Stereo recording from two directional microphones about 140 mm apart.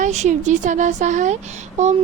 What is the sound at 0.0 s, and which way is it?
Speech, 55° right (ahead or behind).